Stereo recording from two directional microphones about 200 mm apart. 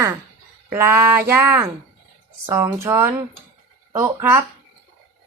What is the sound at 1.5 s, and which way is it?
Speech, 10° right (ahead or behind).